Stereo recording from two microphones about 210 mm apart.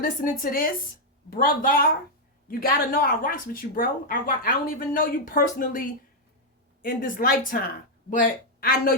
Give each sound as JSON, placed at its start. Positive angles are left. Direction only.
{"t": 0.0, "sound": "a woman's voice", "side_deg": 45}